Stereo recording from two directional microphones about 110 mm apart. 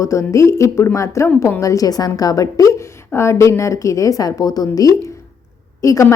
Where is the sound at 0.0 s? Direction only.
30° left (ahead or behind).